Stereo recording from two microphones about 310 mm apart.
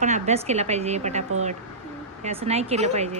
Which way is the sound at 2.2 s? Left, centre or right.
Right.